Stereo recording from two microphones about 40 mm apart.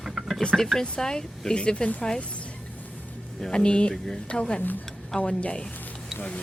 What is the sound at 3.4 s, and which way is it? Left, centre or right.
Speech, left.